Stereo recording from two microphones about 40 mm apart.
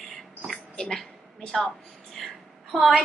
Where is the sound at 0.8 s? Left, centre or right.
Centre.